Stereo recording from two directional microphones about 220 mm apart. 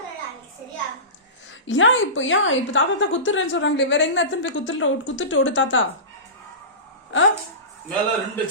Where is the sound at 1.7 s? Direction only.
60° left (ahead or behind).